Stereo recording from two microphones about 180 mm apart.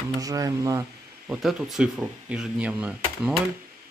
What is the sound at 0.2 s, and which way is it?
Speech, 20° right (ahead or behind).